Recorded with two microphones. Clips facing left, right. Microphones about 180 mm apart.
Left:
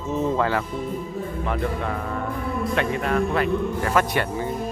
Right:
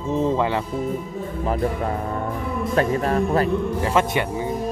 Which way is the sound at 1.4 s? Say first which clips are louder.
Right 4 dB; 35° right (ahead or behind).